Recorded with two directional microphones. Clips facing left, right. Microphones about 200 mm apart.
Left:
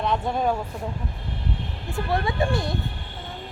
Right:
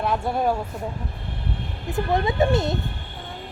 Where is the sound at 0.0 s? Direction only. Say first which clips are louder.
Right 1 dB; 5° right (ahead or behind).